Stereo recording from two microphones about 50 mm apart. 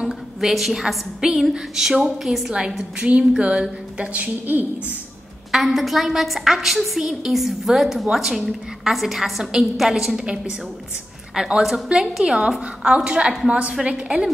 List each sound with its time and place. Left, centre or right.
0.0 s a sound: centre
1.2 s a woman's voice: centre
3.0 s a woman's voice: right
5.5 s a woman's voice: centre
11.3 s a woman's voice: centre